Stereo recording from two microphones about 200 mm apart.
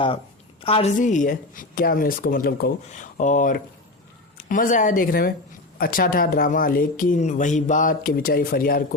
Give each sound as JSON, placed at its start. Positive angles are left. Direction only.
{"t": 0.6, "sound": "speech", "side_deg": 30}
{"t": 2.9, "sound": "speech", "side_deg": 40}